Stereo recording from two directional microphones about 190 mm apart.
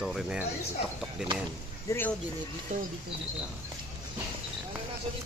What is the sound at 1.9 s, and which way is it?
Speech, 10° left (ahead or behind).